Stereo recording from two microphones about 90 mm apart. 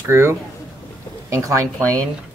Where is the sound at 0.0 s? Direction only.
30° right (ahead or behind).